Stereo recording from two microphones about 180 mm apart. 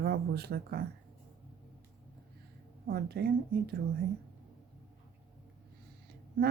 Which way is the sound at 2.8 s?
60° right (ahead or behind).